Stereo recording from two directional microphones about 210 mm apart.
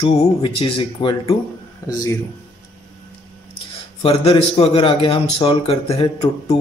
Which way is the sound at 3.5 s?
25° left (ahead or behind).